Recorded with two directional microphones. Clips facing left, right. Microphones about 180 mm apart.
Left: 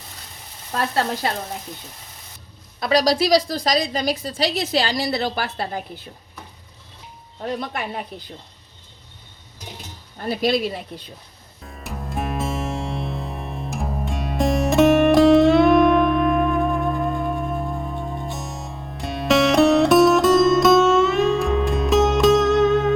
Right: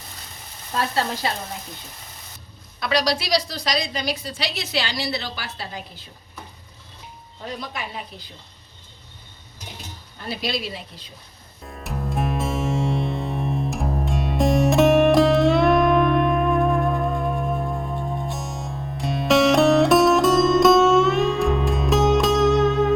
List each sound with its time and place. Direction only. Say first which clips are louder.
0.8 s a woman's voice: left 2 dB; 50° left (ahead or behind)
2.8 s a woman's voice: left 5 dB; 45° left (ahead or behind)
7.4 s speech: left 5 dB; 55° left (ahead or behind)
10.2 s a woman's voice: left 7 dB; 50° left (ahead or behind)
11.6 s music: right 3 dB; centre (ahead or behind)